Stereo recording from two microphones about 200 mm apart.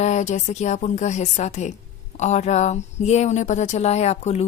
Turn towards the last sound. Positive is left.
turn(degrees=35)  # may be behind; listen again after turning